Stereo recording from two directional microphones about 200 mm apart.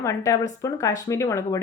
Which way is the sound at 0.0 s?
15° left (ahead or behind).